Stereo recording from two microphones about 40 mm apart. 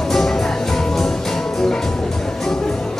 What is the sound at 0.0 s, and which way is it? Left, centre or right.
Music, centre.